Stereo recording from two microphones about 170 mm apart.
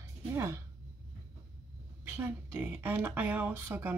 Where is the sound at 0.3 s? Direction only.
15° right (ahead or behind).